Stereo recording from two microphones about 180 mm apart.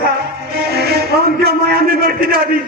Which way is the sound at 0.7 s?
60° right (ahead or behind).